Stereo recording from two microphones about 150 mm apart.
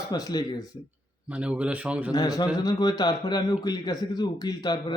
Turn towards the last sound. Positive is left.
turn(degrees=25)  # may be behind; listen again after turning